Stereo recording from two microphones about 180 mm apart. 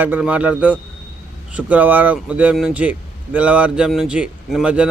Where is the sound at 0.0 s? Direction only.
10° right (ahead or behind).